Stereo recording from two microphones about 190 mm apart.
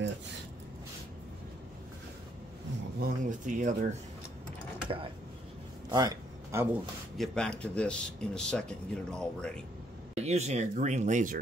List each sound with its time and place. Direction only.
3.0 s speech: 45° right (ahead or behind)
4.8 s speech: 30° right (ahead or behind)
5.9 s a sound: 20° right (ahead or behind)
7.2 s speech: 5° left (ahead or behind)
10.1 s speech: 35° right (ahead or behind)